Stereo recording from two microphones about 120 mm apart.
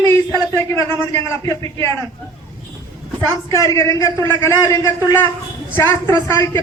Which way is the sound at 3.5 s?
25° left (ahead or behind).